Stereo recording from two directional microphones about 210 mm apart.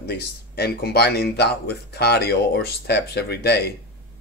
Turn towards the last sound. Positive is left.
turn(degrees=50)  # may be behind; listen again after turning